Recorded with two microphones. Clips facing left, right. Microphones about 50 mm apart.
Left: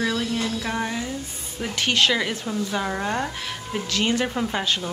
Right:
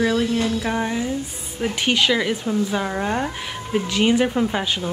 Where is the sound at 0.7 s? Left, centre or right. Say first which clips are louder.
Right 4 dB; centre.